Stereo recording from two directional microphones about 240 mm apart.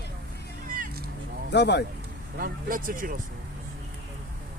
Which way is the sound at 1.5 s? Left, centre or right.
Left.